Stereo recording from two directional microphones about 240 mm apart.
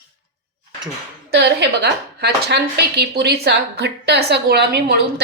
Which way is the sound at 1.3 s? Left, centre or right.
Right.